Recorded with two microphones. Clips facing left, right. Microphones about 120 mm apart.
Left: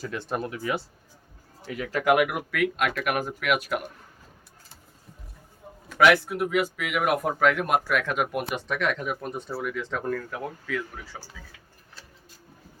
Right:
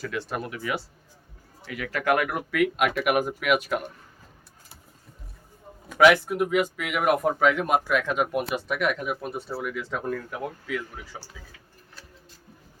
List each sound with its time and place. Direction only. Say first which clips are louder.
0.2 s speech: left 3 dB; 25° left (ahead or behind)
2.3 s speech: right 2 dB; centre (ahead or behind)
5.9 s speech: right 2 dB; centre (ahead or behind)